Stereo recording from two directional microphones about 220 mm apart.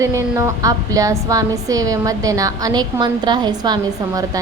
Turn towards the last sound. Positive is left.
turn(degrees=-15)  # may be behind; listen again after turning